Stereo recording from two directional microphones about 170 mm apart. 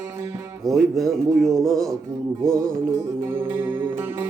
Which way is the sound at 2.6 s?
15° right (ahead or behind).